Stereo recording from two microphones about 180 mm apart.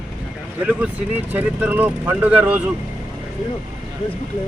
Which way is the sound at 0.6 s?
5° right (ahead or behind).